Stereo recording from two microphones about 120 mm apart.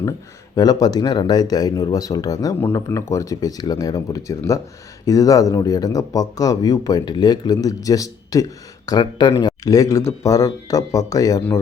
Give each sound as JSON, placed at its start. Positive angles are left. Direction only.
{"t": 0.5, "sound": "speech", "side_deg": 35}